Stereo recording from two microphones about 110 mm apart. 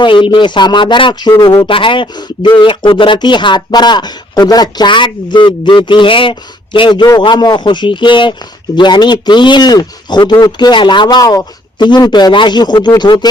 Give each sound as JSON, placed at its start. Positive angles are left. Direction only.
{"t": 0.0, "sound": "a man's voice", "side_deg": 45}